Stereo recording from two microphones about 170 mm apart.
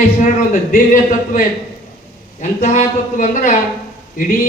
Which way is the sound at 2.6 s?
45° left (ahead or behind).